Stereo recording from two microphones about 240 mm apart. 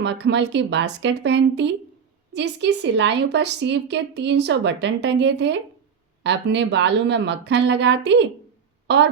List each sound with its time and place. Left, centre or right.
0.0 s a woman's voice: right